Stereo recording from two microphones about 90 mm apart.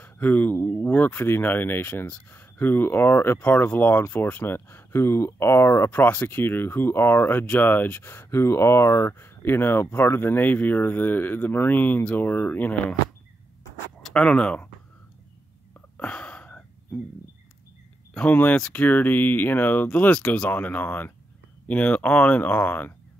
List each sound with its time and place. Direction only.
0.0 s speech: 20° left (ahead or behind)
5.9 s speech: 20° left (ahead or behind)
14.0 s speech: 10° left (ahead or behind)
16.0 s a sound: 10° left (ahead or behind)
18.1 s speech: 15° left (ahead or behind)